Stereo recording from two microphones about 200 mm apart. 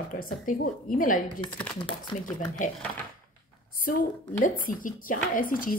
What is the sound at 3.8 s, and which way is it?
A woman's voice, 45° left (ahead or behind).